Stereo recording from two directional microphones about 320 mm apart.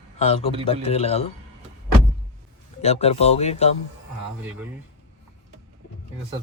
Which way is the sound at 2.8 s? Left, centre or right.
Centre.